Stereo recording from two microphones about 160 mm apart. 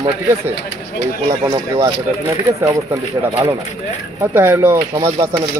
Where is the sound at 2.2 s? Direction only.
20° right (ahead or behind).